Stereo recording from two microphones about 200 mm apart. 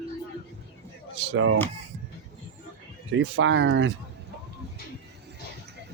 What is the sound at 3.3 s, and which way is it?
Speech, 70° right (ahead or behind).